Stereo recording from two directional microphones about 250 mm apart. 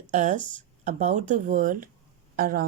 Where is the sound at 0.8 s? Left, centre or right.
Right.